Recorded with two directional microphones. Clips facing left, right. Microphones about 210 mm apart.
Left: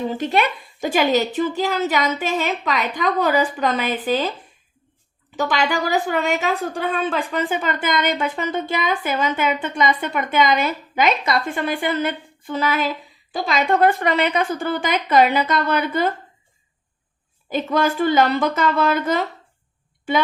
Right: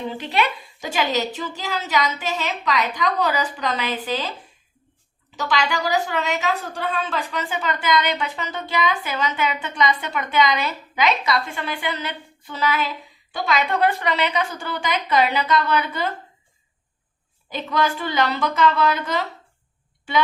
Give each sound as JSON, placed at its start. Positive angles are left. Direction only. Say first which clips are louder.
{"t": 0.1, "sound": "a woman's voice", "louder": "left 3 dB", "side_deg": 45}
{"t": 5.4, "sound": "a woman's voice", "louder": "left 3 dB", "side_deg": 50}
{"t": 17.5, "sound": "a woman's voice", "louder": "left 3 dB", "side_deg": 50}